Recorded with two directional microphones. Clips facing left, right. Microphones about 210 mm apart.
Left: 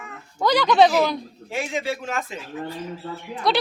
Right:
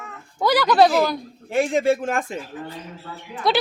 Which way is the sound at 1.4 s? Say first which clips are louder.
Right 8 dB; 50° right (ahead or behind).